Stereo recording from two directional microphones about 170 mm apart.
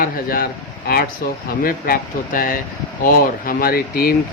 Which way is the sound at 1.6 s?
60° left (ahead or behind).